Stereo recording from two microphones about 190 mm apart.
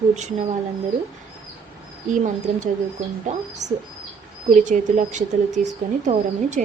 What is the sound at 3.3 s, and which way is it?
Speech, 40° right (ahead or behind).